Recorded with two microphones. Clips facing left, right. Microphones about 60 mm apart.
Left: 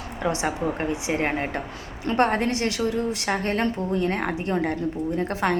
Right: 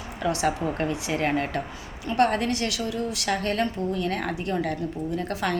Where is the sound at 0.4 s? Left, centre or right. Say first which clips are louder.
Even; left.